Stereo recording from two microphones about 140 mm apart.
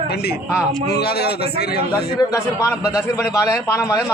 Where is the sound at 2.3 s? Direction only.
20° left (ahead or behind).